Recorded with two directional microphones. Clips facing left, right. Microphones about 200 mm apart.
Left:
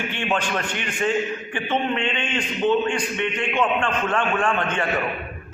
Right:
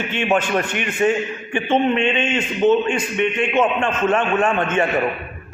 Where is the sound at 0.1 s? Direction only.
20° right (ahead or behind).